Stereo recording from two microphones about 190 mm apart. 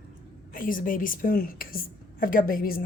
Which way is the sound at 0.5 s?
45° left (ahead or behind).